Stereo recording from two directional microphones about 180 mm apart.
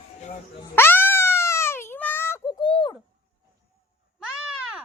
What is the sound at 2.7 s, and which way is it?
Bird, 30° left (ahead or behind).